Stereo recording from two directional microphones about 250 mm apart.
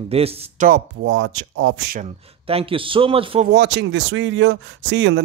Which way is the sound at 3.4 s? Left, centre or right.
Right.